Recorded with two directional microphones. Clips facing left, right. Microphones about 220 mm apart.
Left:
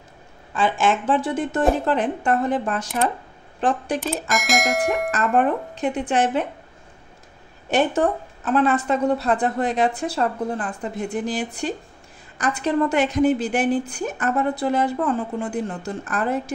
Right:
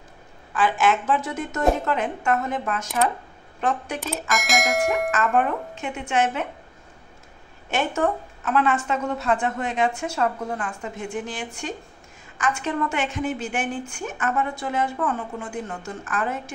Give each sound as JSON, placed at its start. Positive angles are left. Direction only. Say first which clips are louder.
{"t": 0.6, "sound": "a woman's voice", "louder": "left 1 dB", "side_deg": 25}
{"t": 4.3, "sound": "speech", "louder": "left 1 dB", "side_deg": 0}
{"t": 5.1, "sound": "a woman's voice", "louder": "left 2 dB", "side_deg": 35}
{"t": 7.7, "sound": "a woman's voice", "louder": "left 4 dB", "side_deg": 35}